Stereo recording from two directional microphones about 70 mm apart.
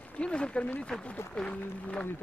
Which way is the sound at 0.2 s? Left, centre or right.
Centre.